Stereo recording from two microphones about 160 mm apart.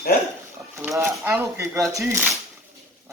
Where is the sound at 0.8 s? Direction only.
15° right (ahead or behind).